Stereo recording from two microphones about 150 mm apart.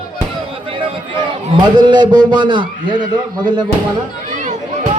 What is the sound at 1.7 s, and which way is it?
A man's voice, 30° right (ahead or behind).